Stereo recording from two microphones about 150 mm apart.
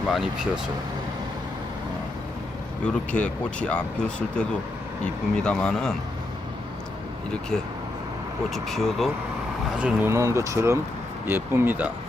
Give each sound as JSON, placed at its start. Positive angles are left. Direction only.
{"t": 0.1, "sound": "speech", "side_deg": 0}
{"t": 2.8, "sound": "speech", "side_deg": 10}
{"t": 7.5, "sound": "speech", "side_deg": 5}
{"t": 9.7, "sound": "speech", "side_deg": -10}